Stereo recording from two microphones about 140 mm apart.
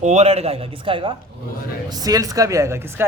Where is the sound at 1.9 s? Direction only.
25° right (ahead or behind).